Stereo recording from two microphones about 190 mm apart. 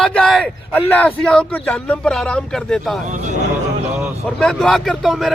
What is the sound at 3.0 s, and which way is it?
Speech, 40° right (ahead or behind).